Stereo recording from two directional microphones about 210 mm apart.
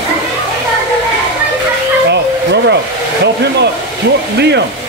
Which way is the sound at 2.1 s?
55° right (ahead or behind).